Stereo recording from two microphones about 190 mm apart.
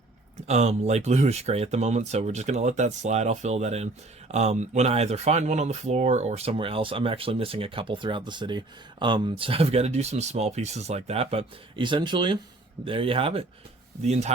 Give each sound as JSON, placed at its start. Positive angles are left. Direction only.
{"t": 0.4, "sound": "speech", "side_deg": -35}